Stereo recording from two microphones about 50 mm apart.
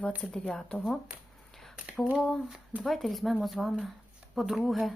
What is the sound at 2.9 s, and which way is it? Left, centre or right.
Speech, centre.